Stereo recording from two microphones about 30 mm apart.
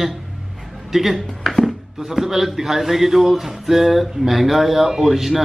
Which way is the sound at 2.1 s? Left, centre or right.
Centre.